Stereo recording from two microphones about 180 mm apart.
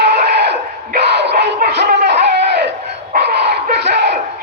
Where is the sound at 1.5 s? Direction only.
70° right (ahead or behind).